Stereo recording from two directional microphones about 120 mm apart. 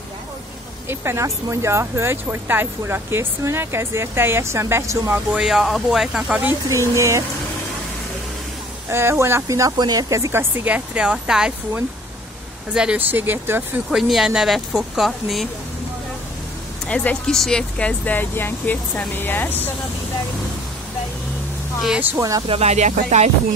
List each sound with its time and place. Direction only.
0.8 s speech: 20° right (ahead or behind)
5.3 s speech: 5° right (ahead or behind)
6.4 s speech: 25° right (ahead or behind)
8.8 s speech: 20° right (ahead or behind)
13.9 s speech: centre (ahead or behind)
16.8 s speech: 10° left (ahead or behind)
22.1 s speech: 30° right (ahead or behind)
22.5 s speech: 65° right (ahead or behind)